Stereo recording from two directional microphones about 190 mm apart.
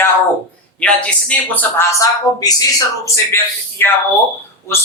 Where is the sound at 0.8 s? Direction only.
5° left (ahead or behind).